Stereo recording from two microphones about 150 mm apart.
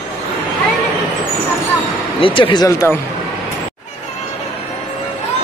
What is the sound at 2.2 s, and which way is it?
Speech, 35° left (ahead or behind).